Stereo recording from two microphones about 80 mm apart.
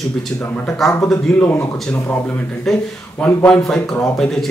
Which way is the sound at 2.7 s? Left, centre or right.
Centre.